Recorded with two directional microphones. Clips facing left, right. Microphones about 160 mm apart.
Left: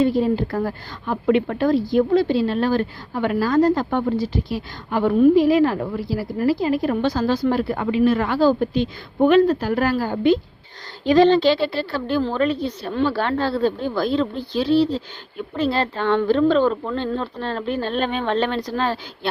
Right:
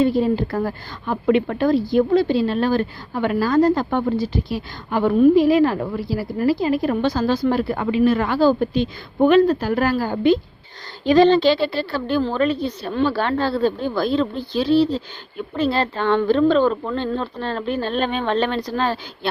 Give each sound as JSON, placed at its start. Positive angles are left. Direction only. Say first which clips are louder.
{"t": 0.5, "sound": "speech", "louder": "right 1 dB", "side_deg": -25}